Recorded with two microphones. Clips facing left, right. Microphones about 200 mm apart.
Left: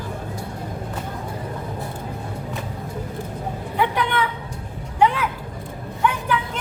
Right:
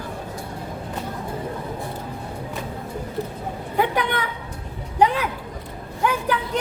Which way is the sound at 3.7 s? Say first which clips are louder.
Even; 45° right (ahead or behind).